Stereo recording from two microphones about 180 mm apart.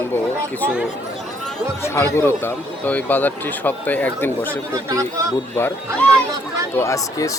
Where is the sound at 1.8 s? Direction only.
15° left (ahead or behind).